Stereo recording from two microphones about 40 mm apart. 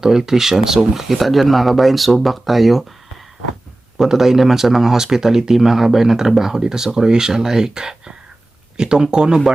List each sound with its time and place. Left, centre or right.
0.0 s speech: centre
3.9 s speech: centre